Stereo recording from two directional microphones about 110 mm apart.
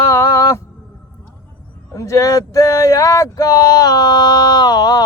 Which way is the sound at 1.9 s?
30° left (ahead or behind).